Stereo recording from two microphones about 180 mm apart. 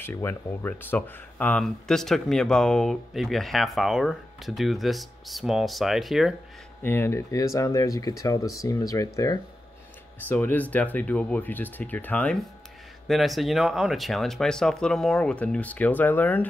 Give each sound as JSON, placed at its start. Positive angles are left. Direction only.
{"t": 0.0, "sound": "speech", "side_deg": 10}
{"t": 6.8, "sound": "speech", "side_deg": 10}